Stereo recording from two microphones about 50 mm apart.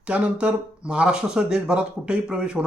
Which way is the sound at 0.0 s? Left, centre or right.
Right.